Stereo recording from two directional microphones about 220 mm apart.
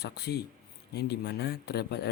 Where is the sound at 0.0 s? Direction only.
45° left (ahead or behind).